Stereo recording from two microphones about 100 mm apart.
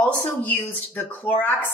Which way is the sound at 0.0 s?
15° left (ahead or behind).